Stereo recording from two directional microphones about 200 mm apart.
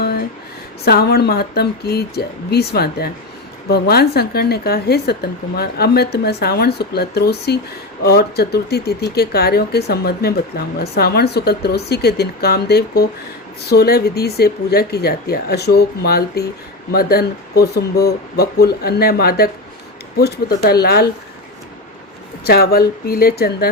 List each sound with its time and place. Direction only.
0.9 s speech: 50° left (ahead or behind)
22.4 s speech: 50° left (ahead or behind)